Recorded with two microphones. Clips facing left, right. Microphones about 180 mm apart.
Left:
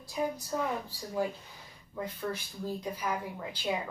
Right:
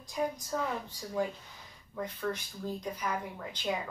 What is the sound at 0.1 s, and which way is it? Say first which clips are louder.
A woman's voice: left 1 dB; 5° left (ahead or behind).